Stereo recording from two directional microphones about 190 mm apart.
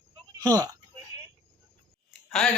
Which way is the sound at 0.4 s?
20° right (ahead or behind).